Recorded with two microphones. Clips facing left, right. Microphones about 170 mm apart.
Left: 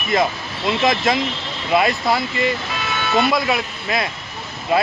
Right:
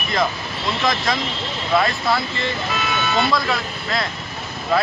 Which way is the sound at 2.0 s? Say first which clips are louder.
Left 3 dB; 10° left (ahead or behind).